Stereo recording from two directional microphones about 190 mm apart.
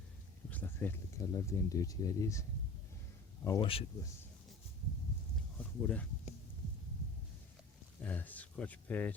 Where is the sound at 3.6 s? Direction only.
30° left (ahead or behind).